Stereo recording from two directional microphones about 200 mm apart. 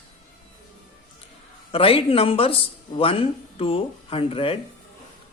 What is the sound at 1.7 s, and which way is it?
Speech, 30° left (ahead or behind).